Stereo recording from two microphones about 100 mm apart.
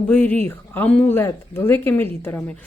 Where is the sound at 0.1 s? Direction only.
20° left (ahead or behind).